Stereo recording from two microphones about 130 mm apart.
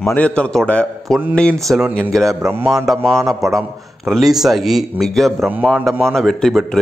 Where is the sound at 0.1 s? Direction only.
10° left (ahead or behind).